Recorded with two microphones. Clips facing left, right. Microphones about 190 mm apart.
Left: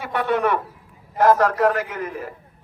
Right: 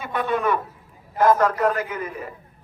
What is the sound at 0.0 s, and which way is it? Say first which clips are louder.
A man's voice: left 2 dB; 75° left (ahead or behind).